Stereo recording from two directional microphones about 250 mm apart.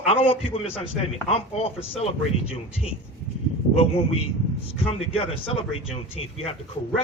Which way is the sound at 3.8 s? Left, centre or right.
Left.